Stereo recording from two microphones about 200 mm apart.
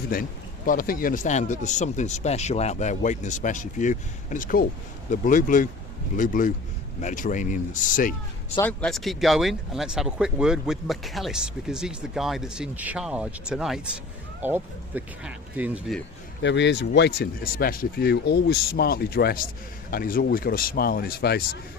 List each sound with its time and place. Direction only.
0.1 s speech: 45° left (ahead or behind)
8.5 s speech: 5° left (ahead or behind)
16.4 s speech: 60° left (ahead or behind)